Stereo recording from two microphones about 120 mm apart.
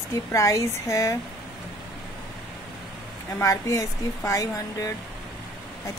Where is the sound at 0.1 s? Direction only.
25° left (ahead or behind).